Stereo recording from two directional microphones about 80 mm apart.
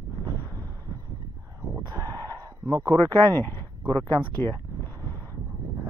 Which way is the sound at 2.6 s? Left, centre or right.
Right.